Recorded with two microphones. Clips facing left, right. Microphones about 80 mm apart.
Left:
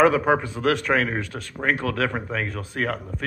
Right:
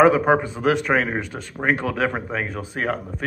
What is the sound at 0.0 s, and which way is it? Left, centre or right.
Speech, centre.